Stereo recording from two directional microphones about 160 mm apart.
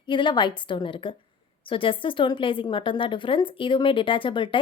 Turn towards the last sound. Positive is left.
turn(degrees=30)  # may be behind; listen again after turning